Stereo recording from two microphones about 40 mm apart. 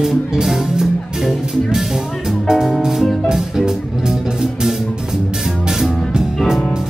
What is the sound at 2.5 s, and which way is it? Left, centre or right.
Music, centre.